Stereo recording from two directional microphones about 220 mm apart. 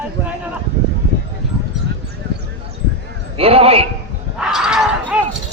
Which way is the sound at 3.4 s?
25° right (ahead or behind).